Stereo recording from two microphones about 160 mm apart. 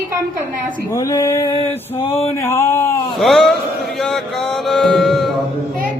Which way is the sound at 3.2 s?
Centre (ahead or behind).